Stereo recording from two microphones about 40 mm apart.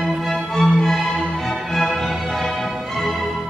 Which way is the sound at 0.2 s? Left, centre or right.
Centre.